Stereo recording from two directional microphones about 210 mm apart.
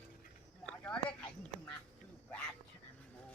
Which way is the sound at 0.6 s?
5° left (ahead or behind).